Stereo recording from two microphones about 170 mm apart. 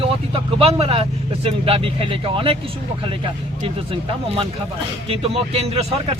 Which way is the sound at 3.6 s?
30° right (ahead or behind).